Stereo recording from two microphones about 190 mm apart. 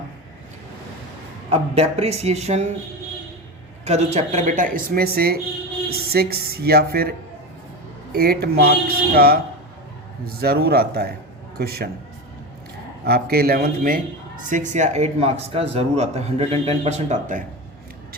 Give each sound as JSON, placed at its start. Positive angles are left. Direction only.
{"t": 1.5, "sound": "speech", "side_deg": -30}
{"t": 3.8, "sound": "speech", "side_deg": -35}
{"t": 8.1, "sound": "speech", "side_deg": -55}
{"t": 10.4, "sound": "speech", "side_deg": -55}
{"t": 13.1, "sound": "speech", "side_deg": -55}